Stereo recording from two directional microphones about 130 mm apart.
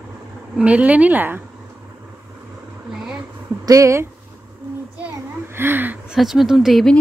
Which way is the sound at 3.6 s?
25° right (ahead or behind).